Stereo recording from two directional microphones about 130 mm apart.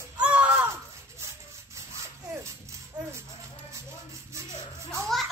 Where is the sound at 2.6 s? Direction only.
20° right (ahead or behind).